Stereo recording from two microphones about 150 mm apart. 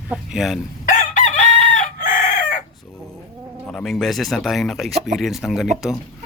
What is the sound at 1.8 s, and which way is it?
Chicken, 65° left (ahead or behind).